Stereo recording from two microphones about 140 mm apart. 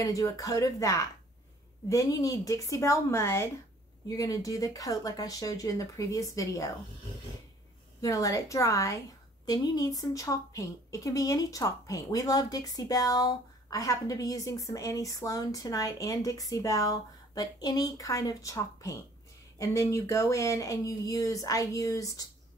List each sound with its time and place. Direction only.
0.0 s speech: 25° left (ahead or behind)
8.0 s speech: 25° left (ahead or behind)